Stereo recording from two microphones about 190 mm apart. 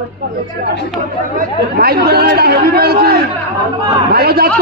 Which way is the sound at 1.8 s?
55° right (ahead or behind).